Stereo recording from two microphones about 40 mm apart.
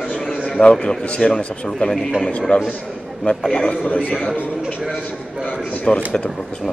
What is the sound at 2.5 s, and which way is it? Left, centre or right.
Speech, left.